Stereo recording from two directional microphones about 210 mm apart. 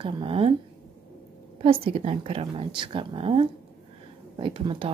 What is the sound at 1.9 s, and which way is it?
Speech, 25° right (ahead or behind).